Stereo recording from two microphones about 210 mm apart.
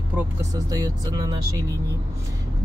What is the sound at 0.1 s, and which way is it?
Speech, 5° right (ahead or behind).